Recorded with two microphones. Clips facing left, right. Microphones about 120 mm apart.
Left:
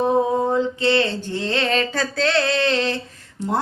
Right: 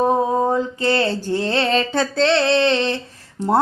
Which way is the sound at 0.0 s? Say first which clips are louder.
Right 1 dB; 45° right (ahead or behind).